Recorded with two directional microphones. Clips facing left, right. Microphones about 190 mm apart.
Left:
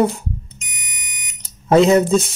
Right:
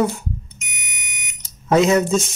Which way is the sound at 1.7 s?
30° left (ahead or behind).